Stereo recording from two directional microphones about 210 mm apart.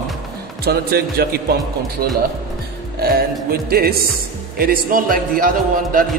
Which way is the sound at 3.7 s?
45° right (ahead or behind).